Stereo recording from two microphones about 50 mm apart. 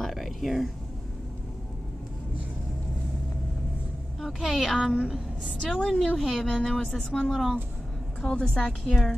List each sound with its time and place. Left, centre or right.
0.0 s a sound: centre
4.2 s a woman's voice: centre
5.6 s a woman's voice: centre
8.2 s a woman's voice: left
8.5 s speech: centre